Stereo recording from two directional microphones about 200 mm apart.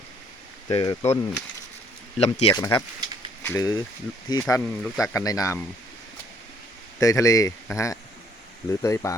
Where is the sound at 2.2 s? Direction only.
30° left (ahead or behind).